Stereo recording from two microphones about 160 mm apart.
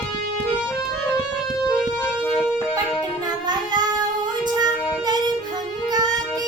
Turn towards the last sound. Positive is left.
turn(degrees=-25)  # may be behind; listen again after turning